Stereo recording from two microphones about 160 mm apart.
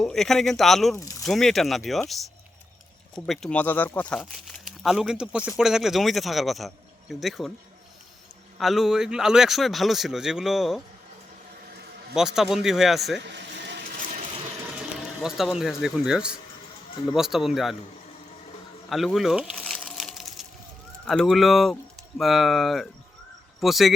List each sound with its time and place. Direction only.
0.0 s speech: centre (ahead or behind)
0.9 s speech: 20° left (ahead or behind)
1.2 s speech: centre (ahead or behind)
3.2 s speech: centre (ahead or behind)
4.2 s speech: centre (ahead or behind)
8.5 s speech: centre (ahead or behind)
12.1 s speech: 5° right (ahead or behind)
13.1 s a sound: 90° right
14.8 s music: 5° right (ahead or behind)
15.8 s speech: 5° right (ahead or behind)
18.9 s speech: centre (ahead or behind)
19.6 s a sound: 5° left (ahead or behind)
21.0 s speech: centre (ahead or behind)